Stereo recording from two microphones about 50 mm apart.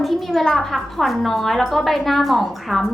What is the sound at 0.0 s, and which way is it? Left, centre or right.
A woman's voice, centre.